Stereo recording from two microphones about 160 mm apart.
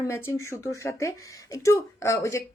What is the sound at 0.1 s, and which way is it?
Speech, 15° left (ahead or behind).